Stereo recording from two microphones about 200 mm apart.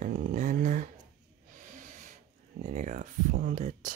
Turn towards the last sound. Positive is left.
turn(degrees=-40)  # may be behind; listen again after turning